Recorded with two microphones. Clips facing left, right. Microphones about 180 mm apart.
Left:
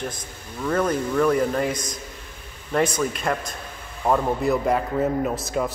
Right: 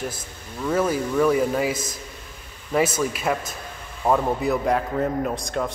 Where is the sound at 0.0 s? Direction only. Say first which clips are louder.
Even; 5° right (ahead or behind).